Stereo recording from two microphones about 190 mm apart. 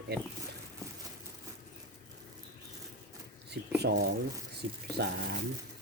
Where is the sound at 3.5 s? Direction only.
60° right (ahead or behind).